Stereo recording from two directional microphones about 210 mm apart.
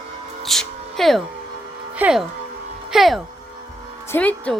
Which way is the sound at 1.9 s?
5° right (ahead or behind).